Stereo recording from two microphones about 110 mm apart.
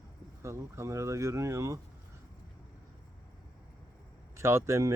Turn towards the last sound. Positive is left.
turn(degrees=-25)  # may be behind; listen again after turning